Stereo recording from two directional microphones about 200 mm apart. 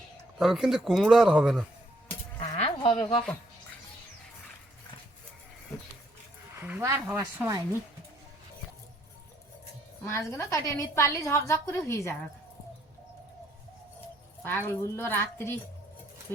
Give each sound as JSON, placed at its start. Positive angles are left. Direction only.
{"t": 0.3, "sound": "speech", "side_deg": 0}
{"t": 2.6, "sound": "a sound", "side_deg": 25}
{"t": 6.6, "sound": "speech", "side_deg": -10}
{"t": 10.1, "sound": "a woman's voice", "side_deg": 15}
{"t": 14.4, "sound": "a woman's voice", "side_deg": 10}